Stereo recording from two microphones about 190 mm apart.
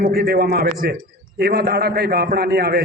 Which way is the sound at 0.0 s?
55° right (ahead or behind).